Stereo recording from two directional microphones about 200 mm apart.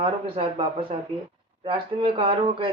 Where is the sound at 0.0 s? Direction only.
25° right (ahead or behind).